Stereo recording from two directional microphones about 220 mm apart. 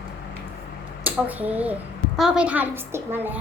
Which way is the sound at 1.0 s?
5° right (ahead or behind).